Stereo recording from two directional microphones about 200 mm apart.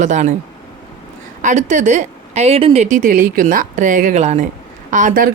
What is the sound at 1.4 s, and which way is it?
Speech, 35° right (ahead or behind).